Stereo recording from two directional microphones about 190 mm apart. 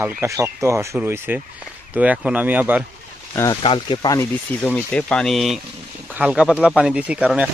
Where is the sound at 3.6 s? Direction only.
25° left (ahead or behind); by 7.5 s 5° right (ahead or behind).